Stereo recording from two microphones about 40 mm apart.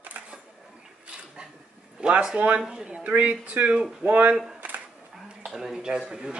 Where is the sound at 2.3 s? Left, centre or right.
Right.